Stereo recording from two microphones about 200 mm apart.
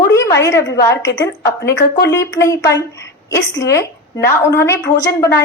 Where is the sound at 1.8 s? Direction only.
55° left (ahead or behind).